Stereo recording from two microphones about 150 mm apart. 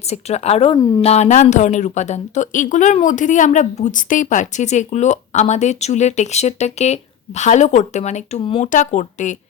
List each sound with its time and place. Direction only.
0.1 s speech: 45° left (ahead or behind)
0.8 s speech: 25° left (ahead or behind)
1.0 s speech: 45° left (ahead or behind)
8.6 s speech: 55° left (ahead or behind)